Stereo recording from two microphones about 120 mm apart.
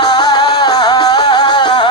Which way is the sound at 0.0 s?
35° left (ahead or behind).